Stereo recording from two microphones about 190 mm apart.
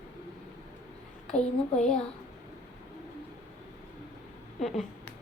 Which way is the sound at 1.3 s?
40° left (ahead or behind).